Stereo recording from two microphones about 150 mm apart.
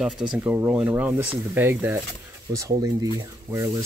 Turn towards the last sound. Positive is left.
turn(degrees=-20)  # may be behind; listen again after turning